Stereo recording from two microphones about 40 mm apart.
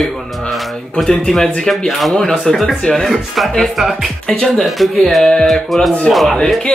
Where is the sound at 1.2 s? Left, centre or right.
Centre.